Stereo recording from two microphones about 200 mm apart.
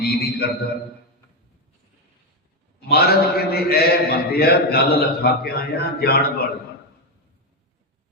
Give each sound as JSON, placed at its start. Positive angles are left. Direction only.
{"t": 0.0, "sound": "a man's voice", "side_deg": 50}
{"t": 2.9, "sound": "a man's voice", "side_deg": 50}